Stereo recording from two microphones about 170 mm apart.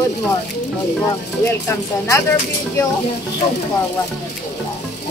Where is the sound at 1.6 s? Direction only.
20° left (ahead or behind).